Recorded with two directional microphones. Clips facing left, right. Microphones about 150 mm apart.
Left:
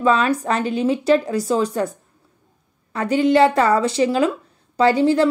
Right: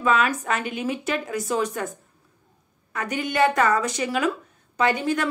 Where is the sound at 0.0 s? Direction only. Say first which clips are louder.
Left 5 dB; 30° left (ahead or behind).